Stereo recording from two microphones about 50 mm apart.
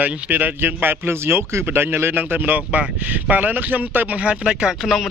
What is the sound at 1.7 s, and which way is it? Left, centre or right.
Speech, right.